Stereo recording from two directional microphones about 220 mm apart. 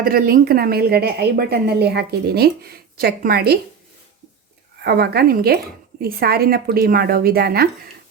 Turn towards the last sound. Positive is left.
turn(degrees=-45)  # may be behind; listen again after turning